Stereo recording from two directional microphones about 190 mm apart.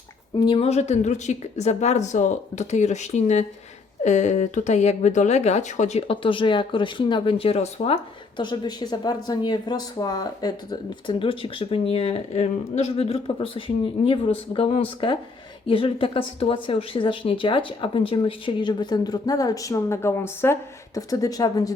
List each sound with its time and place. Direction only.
0.3 s a woman's voice: 25° left (ahead or behind)